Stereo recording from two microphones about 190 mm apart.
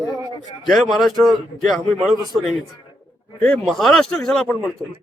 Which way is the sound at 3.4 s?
5° left (ahead or behind).